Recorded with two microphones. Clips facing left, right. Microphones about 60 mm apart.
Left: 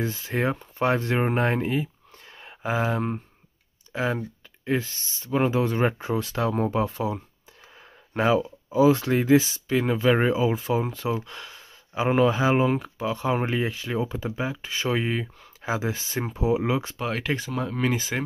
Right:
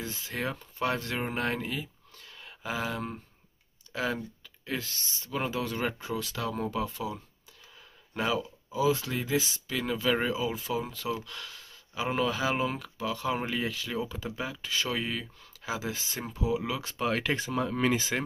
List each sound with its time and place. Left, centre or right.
0.0 s speech: left
2.3 s a sound: left
3.9 s speech: centre
11.2 s speech: left
16.8 s speech: centre